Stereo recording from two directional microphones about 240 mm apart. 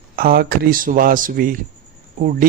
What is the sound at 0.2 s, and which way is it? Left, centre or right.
A man's voice, right.